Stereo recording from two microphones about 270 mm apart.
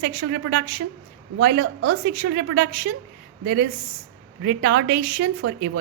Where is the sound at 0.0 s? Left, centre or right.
Right.